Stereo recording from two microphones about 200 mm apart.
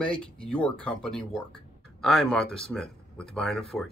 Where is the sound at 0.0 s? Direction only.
5° left (ahead or behind).